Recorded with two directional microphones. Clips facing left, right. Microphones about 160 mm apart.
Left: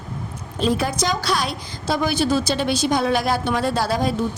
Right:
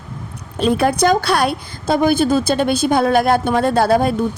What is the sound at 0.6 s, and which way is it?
A woman's voice, 60° right (ahead or behind).